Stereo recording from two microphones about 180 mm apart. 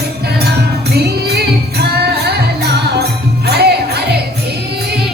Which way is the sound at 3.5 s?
65° right (ahead or behind).